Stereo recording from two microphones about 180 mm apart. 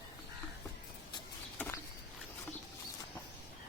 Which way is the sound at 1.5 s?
10° left (ahead or behind).